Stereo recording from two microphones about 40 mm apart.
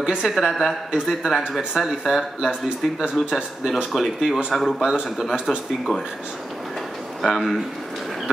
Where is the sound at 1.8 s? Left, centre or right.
Centre.